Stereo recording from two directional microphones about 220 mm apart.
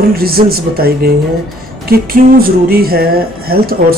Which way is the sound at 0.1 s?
45° right (ahead or behind).